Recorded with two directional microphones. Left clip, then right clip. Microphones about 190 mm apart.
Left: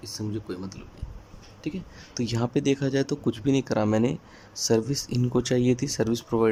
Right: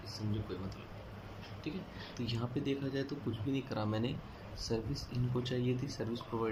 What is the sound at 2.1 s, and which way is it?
Speech, 50° left (ahead or behind).